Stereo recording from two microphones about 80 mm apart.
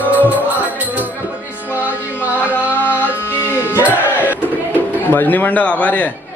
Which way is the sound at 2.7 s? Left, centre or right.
Left.